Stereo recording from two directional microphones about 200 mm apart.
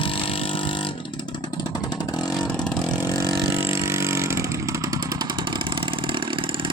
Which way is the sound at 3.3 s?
15° right (ahead or behind).